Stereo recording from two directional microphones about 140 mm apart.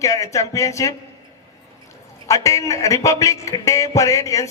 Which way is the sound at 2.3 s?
20° left (ahead or behind).